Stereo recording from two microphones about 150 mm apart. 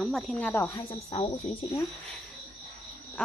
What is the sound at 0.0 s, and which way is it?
Speech, centre (ahead or behind).